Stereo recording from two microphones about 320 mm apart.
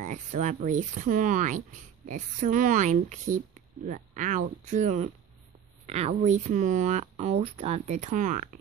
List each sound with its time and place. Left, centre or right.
0.0 s speech: right